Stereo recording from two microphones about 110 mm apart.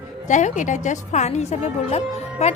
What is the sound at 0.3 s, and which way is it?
A woman's voice, 90° left.